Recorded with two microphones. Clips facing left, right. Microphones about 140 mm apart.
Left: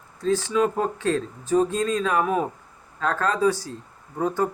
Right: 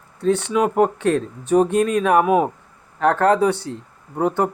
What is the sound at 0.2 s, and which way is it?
Speech, 65° right (ahead or behind).